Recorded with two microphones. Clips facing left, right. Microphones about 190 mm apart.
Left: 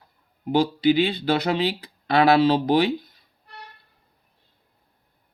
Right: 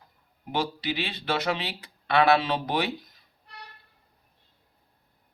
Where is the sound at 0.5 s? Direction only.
30° left (ahead or behind).